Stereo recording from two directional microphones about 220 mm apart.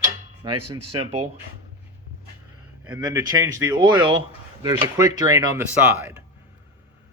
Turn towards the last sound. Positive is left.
turn(degrees=-10)  # may be behind; listen again after turning